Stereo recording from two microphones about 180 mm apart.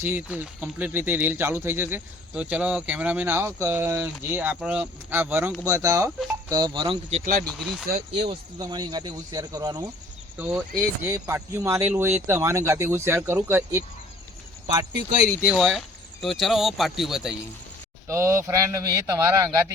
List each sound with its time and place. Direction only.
0.0 s speech: 10° right (ahead or behind)
6.1 s speech: centre (ahead or behind)
6.5 s speech: 25° right (ahead or behind)
7.4 s speech: centre (ahead or behind)
8.1 s speech: 35° right (ahead or behind)
8.5 s speech: 20° right (ahead or behind)
10.3 s speech: 10° right (ahead or behind)
15.4 s speech: centre (ahead or behind)
18.1 s speech: 15° right (ahead or behind)